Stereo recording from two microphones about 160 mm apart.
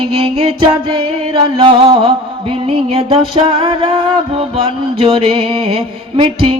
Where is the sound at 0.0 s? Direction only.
35° right (ahead or behind).